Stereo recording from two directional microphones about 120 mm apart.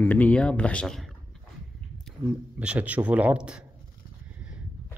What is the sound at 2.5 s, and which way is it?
Speech, 10° right (ahead or behind).